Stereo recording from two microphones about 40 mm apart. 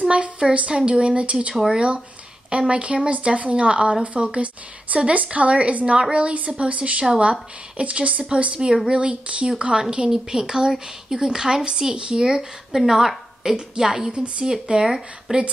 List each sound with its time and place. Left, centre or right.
0.1 s speech: right
12.4 s a woman's voice: centre
14.7 s speech: right